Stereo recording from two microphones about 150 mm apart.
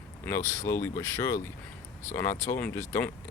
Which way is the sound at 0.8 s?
20° left (ahead or behind).